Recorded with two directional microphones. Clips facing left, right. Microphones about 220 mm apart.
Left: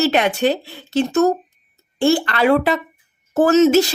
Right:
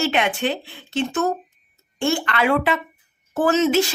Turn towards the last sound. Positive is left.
turn(degrees=40)  # may be behind; listen again after turning